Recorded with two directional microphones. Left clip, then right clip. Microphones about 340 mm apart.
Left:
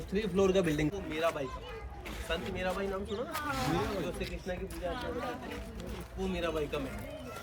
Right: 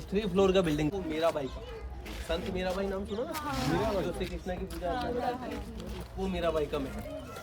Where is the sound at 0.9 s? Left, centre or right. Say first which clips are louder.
Right 3 dB; right.